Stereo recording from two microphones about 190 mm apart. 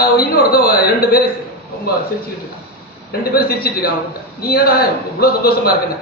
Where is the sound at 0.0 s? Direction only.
50° left (ahead or behind).